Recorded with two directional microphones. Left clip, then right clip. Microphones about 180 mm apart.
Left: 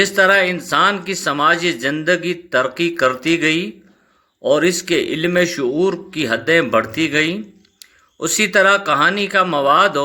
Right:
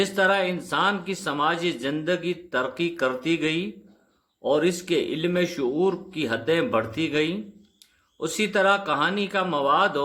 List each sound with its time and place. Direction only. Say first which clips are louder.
0.2 s speech: left 8 dB; 10° left (ahead or behind)